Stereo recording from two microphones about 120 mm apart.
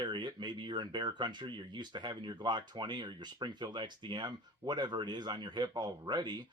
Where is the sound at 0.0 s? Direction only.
40° right (ahead or behind).